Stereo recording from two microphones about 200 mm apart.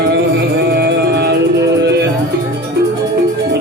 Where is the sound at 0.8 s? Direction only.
55° right (ahead or behind).